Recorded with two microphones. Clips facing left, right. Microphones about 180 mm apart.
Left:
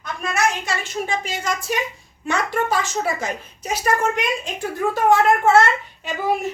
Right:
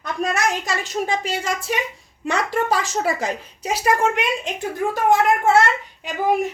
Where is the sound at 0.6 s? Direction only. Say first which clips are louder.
Right 2 dB; 40° right (ahead or behind).